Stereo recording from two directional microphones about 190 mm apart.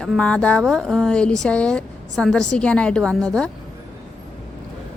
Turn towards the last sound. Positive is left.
turn(degrees=5)  # may be behind; listen again after turning